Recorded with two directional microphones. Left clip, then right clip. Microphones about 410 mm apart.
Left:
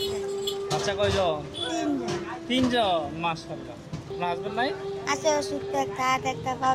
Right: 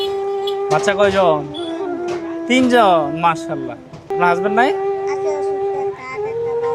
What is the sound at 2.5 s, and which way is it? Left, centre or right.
Speech, right.